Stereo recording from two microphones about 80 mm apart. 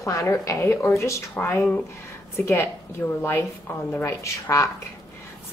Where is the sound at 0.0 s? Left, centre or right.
Left.